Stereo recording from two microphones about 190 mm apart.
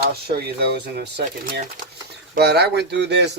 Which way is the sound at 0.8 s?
60° right (ahead or behind).